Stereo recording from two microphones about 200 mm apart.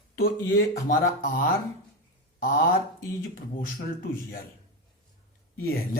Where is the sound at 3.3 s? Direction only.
50° left (ahead or behind).